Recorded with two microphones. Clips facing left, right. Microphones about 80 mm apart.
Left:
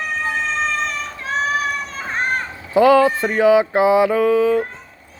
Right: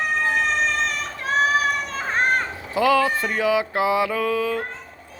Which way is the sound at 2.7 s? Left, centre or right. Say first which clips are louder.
Left 7 dB; left.